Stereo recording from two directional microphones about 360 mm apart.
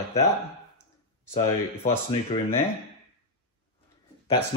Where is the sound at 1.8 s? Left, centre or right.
Centre.